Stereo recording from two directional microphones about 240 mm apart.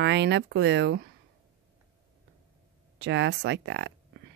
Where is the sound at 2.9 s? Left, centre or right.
Right.